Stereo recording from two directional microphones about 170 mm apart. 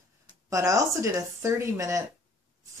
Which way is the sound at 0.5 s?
20° right (ahead or behind).